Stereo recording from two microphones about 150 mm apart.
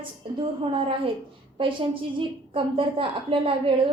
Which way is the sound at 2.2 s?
35° right (ahead or behind).